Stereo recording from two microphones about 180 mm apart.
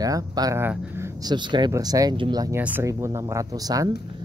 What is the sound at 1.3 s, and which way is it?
Speech, 25° right (ahead or behind).